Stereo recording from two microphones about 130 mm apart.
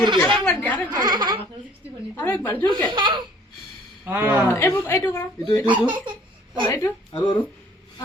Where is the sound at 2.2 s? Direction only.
15° left (ahead or behind).